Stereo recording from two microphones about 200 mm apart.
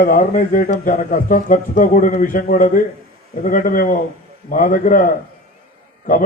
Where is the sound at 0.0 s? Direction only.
40° left (ahead or behind).